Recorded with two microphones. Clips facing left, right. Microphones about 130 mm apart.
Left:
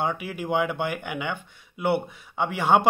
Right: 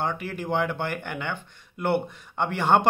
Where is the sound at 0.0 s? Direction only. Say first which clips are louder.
Left 1 dB; 10° left (ahead or behind).